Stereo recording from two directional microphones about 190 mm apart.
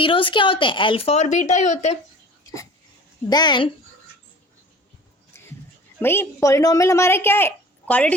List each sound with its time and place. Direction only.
0.0 s speech: 25° left (ahead or behind)
3.2 s speech: 20° left (ahead or behind)
6.0 s speech: 10° left (ahead or behind)